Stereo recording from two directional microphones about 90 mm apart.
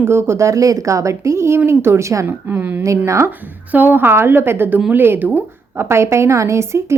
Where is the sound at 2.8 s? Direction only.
35° right (ahead or behind).